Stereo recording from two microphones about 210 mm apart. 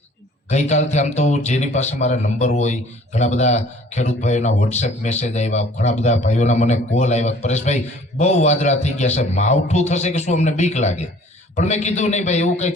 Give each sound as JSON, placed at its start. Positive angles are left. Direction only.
{"t": 0.5, "sound": "a man's voice", "side_deg": 35}